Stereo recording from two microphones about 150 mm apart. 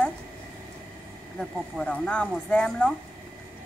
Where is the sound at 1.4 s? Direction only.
5° left (ahead or behind).